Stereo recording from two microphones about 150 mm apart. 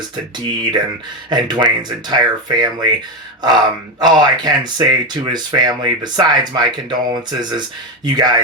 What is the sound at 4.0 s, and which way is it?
Speech, 30° right (ahead or behind).